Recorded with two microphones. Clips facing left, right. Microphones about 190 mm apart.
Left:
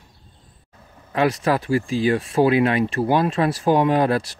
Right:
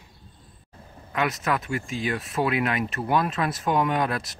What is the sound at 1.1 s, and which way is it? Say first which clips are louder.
Speech: left 6 dB; 30° left (ahead or behind).